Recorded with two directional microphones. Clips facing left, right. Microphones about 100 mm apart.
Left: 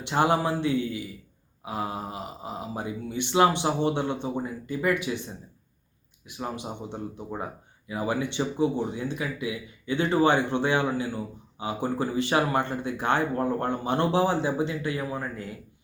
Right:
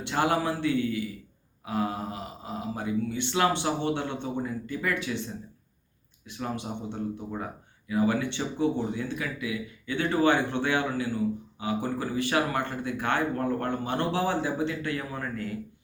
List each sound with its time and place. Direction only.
0.0 s speech: 20° left (ahead or behind)